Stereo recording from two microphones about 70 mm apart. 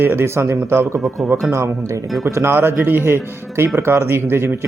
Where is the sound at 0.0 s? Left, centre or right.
Right.